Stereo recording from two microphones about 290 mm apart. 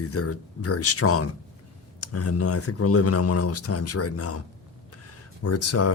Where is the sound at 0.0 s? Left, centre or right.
Left.